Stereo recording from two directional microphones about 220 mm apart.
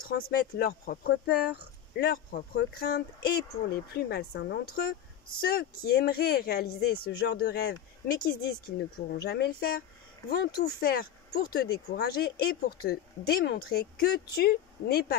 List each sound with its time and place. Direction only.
0.3 s speech: 45° left (ahead or behind)